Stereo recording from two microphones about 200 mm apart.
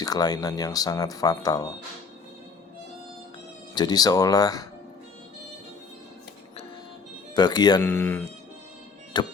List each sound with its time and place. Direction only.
0.0 s speech: 20° left (ahead or behind)
3.8 s speech: 20° left (ahead or behind)
7.3 s speech: 20° left (ahead or behind)
7.9 s speech: 10° left (ahead or behind)
9.2 s speech: 20° left (ahead or behind)